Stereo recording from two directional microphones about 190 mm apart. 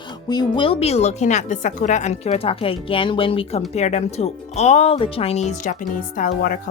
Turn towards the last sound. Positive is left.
turn(degrees=45)  # may be behind; listen again after turning